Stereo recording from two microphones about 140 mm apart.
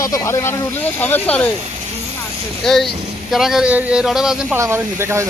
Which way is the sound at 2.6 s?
Centre (ahead or behind).